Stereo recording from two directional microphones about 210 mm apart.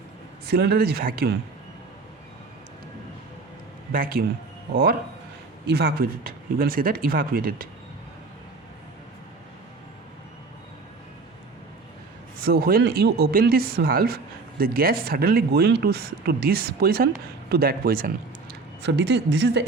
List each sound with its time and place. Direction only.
0.4 s speech: 50° right (ahead or behind)
3.9 s speech: 45° right (ahead or behind)
12.5 s speech: 45° right (ahead or behind)